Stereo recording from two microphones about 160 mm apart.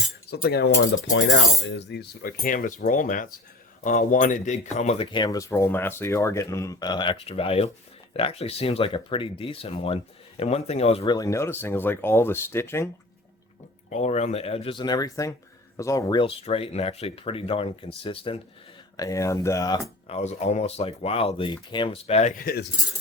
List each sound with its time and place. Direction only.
0.3 s cutlery: 90° left
1.9 s speech: 75° left (ahead or behind); by 5.0 s 45° left (ahead or behind)
5.1 s speech: 25° left (ahead or behind); by 11.0 s 40° left (ahead or behind)
11.0 s speech: 25° left (ahead or behind)
13.9 s speech: 45° left (ahead or behind); by 16.2 s 20° left (ahead or behind)
16.2 s speech: 35° left (ahead or behind)
18.9 s speech: 20° left (ahead or behind)
20.1 s speech: 40° left (ahead or behind); by 22.6 s 65° left (ahead or behind)